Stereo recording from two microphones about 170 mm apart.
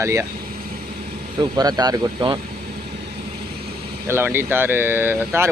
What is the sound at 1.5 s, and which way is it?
Speech, 25° right (ahead or behind).